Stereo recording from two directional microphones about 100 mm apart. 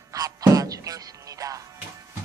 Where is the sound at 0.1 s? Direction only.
35° right (ahead or behind).